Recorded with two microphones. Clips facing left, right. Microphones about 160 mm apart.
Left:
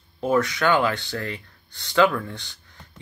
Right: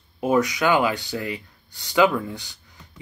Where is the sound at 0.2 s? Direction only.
15° right (ahead or behind).